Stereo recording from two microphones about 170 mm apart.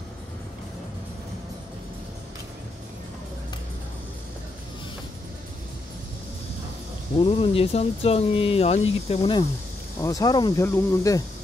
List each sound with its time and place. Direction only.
7.2 s speech: 35° left (ahead or behind)
9.9 s speech: 20° left (ahead or behind)